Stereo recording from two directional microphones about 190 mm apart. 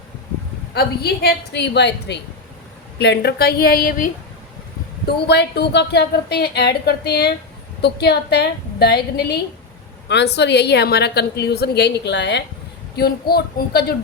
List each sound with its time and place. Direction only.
0.7 s a woman's voice: 55° left (ahead or behind)
5.3 s a woman's voice: 60° left (ahead or behind)